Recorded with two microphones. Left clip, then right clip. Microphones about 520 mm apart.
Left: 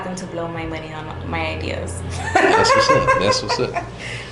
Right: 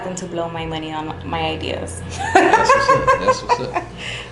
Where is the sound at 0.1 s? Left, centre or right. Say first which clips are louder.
Right 2 dB; right.